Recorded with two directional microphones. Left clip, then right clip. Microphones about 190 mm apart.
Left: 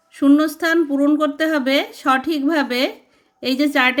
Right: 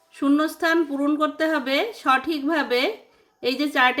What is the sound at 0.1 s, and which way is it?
A woman's voice, 35° left (ahead or behind).